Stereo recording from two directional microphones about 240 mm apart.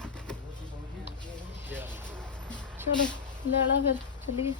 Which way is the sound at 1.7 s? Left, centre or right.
Centre.